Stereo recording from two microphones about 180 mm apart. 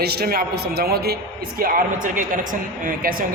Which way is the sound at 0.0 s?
60° right (ahead or behind).